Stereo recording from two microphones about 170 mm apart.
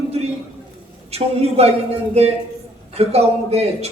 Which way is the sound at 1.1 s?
35° right (ahead or behind).